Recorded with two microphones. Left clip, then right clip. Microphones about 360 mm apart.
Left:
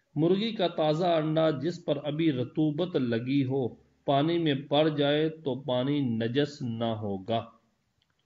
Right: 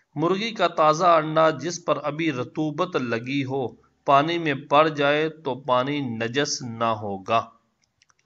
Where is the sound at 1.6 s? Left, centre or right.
Right.